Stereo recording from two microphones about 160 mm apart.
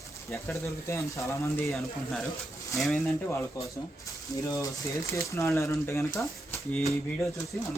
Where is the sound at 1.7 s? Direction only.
Centre (ahead or behind).